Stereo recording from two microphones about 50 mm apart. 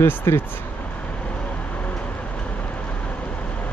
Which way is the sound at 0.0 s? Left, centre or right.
Left.